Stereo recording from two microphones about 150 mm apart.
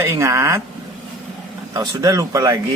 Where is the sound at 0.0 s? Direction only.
20° right (ahead or behind).